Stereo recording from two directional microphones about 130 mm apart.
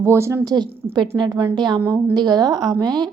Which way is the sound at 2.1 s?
30° right (ahead or behind).